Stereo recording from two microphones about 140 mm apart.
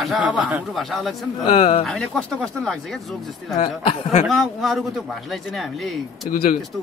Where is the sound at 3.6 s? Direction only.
40° left (ahead or behind).